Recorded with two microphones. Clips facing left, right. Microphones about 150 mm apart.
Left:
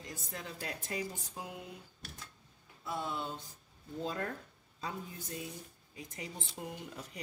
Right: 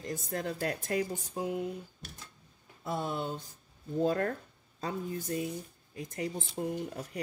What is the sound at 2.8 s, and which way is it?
Speech, 50° right (ahead or behind).